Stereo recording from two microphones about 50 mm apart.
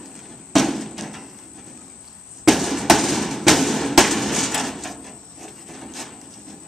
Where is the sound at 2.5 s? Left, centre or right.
Centre.